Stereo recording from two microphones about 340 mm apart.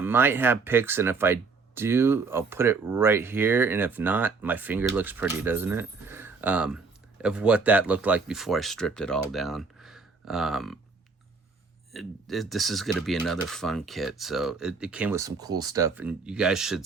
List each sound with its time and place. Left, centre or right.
0.0 s speech: centre
11.9 s speech: centre